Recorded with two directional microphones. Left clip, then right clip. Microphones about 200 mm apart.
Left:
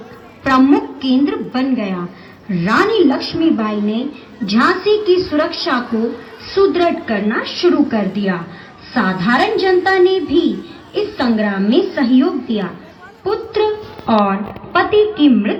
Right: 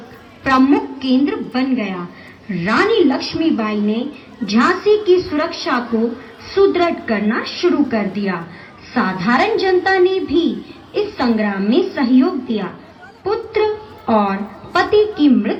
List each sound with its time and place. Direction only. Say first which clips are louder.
0.4 s a woman's voice: left 1 dB; 45° left (ahead or behind)